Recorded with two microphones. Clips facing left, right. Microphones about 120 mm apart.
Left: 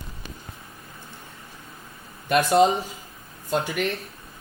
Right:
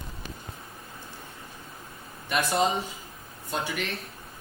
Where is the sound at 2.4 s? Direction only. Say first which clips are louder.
Left 7 dB; 40° left (ahead or behind).